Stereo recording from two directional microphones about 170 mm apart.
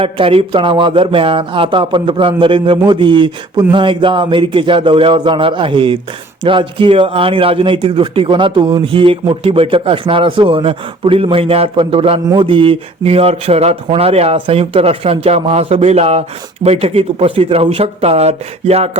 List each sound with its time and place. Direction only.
0.0 s a man's voice: 35° right (ahead or behind)